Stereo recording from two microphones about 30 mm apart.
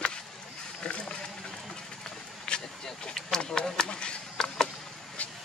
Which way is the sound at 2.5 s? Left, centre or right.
Left.